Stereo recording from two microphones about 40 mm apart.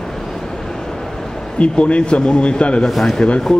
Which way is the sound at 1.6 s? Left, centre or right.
Left.